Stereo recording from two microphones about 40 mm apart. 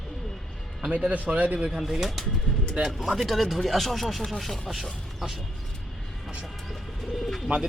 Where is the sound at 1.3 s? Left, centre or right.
Right.